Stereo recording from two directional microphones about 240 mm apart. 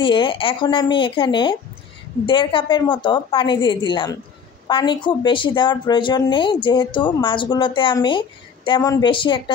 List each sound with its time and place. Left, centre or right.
0.0 s a woman's voice: left